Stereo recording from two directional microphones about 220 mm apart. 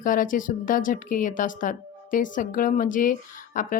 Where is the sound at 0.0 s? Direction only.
40° left (ahead or behind).